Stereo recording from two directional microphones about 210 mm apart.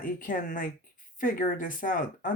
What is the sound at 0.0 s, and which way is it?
Speech, 40° left (ahead or behind).